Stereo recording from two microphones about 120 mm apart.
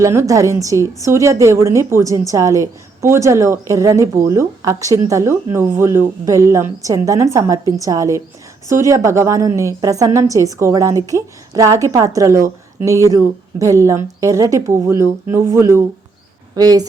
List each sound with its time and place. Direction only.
0.0 s a woman's voice: 25° right (ahead or behind)